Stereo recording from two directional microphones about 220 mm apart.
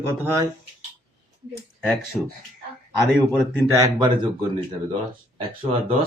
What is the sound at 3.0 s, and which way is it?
Speech, 10° left (ahead or behind).